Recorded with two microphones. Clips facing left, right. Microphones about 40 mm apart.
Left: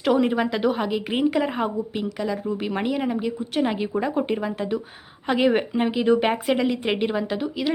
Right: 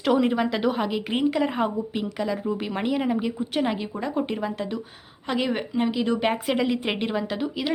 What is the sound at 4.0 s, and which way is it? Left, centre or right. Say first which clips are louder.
Speech: left 1 dB; centre.